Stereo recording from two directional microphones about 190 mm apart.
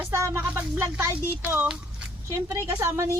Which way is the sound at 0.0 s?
10° right (ahead or behind).